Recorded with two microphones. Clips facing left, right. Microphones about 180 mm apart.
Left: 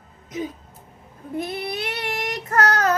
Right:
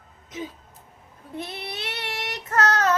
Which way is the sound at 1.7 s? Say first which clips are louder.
Left 5 dB; 60° left (ahead or behind).